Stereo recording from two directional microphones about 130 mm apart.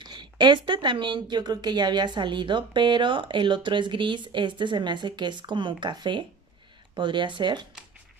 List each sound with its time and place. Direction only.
0.0 s speech: 35° right (ahead or behind)